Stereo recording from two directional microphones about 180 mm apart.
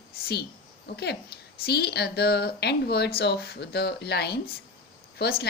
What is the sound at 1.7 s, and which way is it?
A woman's voice, 65° left (ahead or behind).